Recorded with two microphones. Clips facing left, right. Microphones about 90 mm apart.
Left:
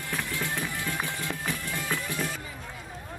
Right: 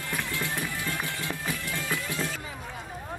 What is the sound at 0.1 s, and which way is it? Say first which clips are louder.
Music: even; 5° right (ahead or behind).